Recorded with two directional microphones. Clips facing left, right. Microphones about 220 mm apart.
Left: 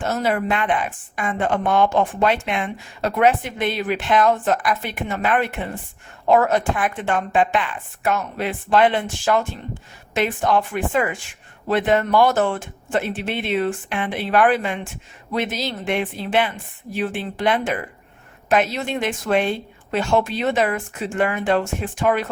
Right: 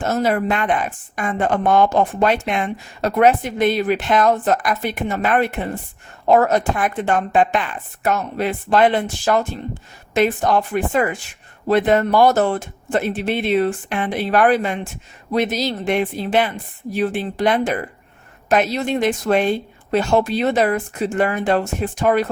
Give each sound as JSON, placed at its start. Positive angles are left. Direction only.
{"t": 0.0, "sound": "a woman's voice", "side_deg": -40}